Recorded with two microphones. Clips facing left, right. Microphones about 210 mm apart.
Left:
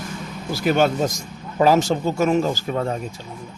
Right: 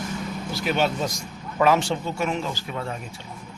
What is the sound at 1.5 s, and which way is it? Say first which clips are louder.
Speech: left 4 dB; 35° left (ahead or behind).